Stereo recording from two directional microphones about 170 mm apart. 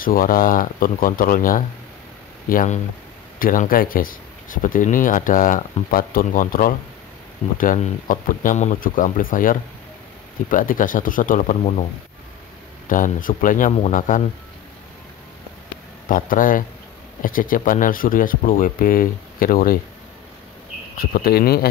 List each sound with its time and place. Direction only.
0.0 s speech: 55° left (ahead or behind)
12.8 s speech: 50° left (ahead or behind)
16.1 s speech: 50° left (ahead or behind)
21.0 s speech: 60° left (ahead or behind)